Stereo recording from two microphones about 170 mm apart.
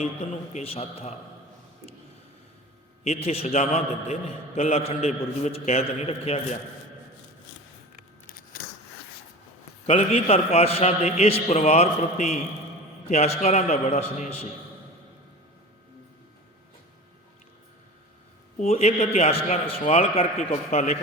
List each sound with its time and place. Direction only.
0.0 s a man's voice: 40° left (ahead or behind)
3.0 s a man's voice: 40° left (ahead or behind)
9.8 s a man's voice: 35° left (ahead or behind)
18.5 s a man's voice: 40° left (ahead or behind)